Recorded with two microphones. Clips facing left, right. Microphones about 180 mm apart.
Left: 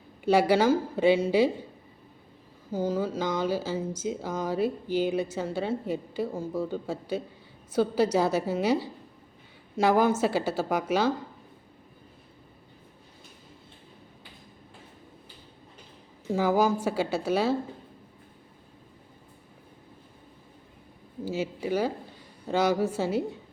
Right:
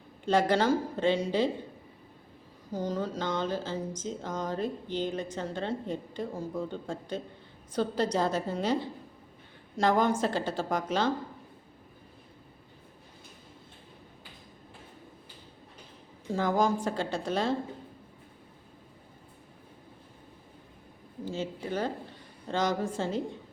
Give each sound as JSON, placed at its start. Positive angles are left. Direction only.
{"t": 0.3, "sound": "speech", "side_deg": 10}
{"t": 2.7, "sound": "speech", "side_deg": 5}
{"t": 16.3, "sound": "speech", "side_deg": 10}
{"t": 21.2, "sound": "speech", "side_deg": 10}